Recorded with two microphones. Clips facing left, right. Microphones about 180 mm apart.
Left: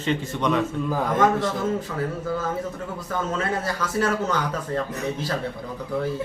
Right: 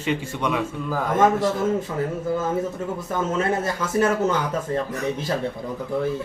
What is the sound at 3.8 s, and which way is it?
Speech, 20° right (ahead or behind).